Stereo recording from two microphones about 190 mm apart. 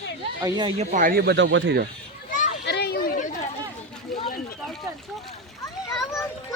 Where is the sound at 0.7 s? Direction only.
45° right (ahead or behind); by 1.8 s 75° right (ahead or behind).